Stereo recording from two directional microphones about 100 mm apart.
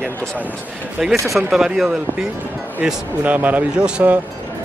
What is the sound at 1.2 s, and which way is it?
Speech, centre (ahead or behind).